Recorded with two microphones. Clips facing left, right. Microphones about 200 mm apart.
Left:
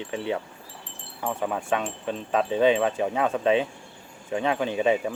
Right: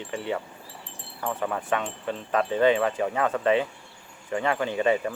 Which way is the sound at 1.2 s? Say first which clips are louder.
Left 1 dB; 10° left (ahead or behind).